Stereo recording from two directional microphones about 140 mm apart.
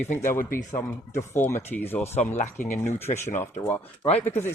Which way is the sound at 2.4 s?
60° left (ahead or behind).